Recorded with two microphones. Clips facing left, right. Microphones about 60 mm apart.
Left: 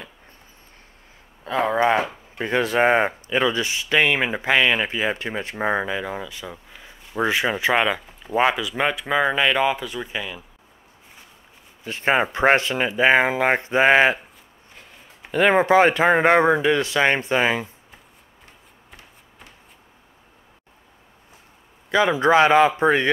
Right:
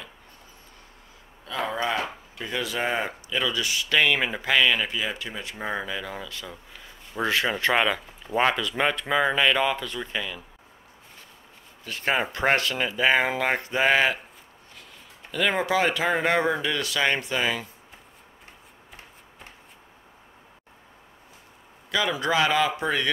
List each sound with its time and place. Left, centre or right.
1.4 s a sound: left
2.3 s speech: left; by 10.4 s centre
11.8 s speech: left
15.3 s speech: left
21.9 s speech: left